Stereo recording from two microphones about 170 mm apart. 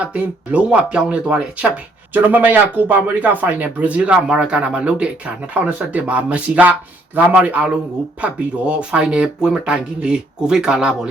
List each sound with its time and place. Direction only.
0.1 s speech: 5° right (ahead or behind)